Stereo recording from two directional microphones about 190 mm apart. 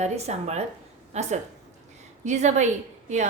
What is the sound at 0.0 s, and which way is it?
A woman's voice, 35° right (ahead or behind).